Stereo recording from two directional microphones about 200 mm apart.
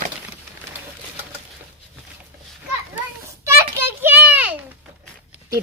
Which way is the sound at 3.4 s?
15° right (ahead or behind).